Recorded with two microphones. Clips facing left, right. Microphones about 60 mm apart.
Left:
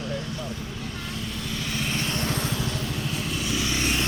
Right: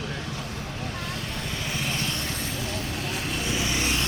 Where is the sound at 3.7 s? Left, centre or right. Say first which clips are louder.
Left 1 dB; centre.